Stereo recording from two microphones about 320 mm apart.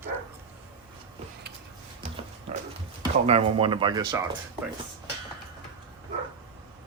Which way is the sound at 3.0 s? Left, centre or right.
Centre.